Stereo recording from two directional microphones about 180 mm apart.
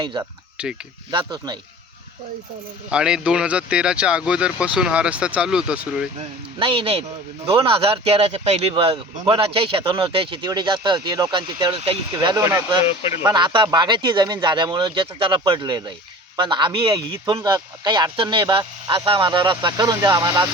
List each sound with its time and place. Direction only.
0.0 s speech: 25° right (ahead or behind)
0.5 s speech: 5° right (ahead or behind)
1.1 s speech: 25° right (ahead or behind)
2.9 s speech: 5° right (ahead or behind)
6.6 s speech: 30° right (ahead or behind)